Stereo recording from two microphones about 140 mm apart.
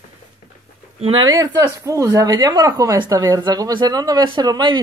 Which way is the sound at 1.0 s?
40° right (ahead or behind).